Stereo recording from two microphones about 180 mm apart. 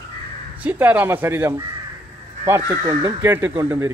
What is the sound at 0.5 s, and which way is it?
Speech, 10° right (ahead or behind).